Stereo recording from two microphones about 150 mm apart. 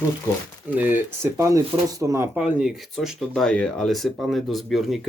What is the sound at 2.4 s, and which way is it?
Speech, 5° right (ahead or behind).